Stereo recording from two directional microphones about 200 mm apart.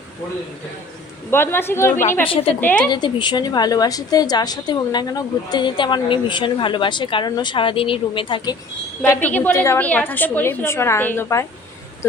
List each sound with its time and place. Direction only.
1.3 s a woman's voice: 10° left (ahead or behind)
2.2 s a woman's voice: 25° left (ahead or behind)
2.6 s a woman's voice: 10° left (ahead or behind)
2.9 s a woman's voice: 20° left (ahead or behind)
9.0 s a woman's voice: 5° left (ahead or behind)